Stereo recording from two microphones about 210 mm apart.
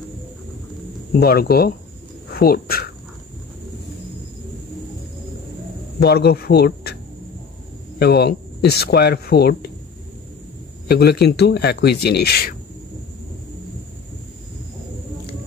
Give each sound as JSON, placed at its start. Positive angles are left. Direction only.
{"t": 1.2, "sound": "speech", "side_deg": 45}
{"t": 5.9, "sound": "speech", "side_deg": 50}
{"t": 8.0, "sound": "speech", "side_deg": 50}
{"t": 10.9, "sound": "speech", "side_deg": 50}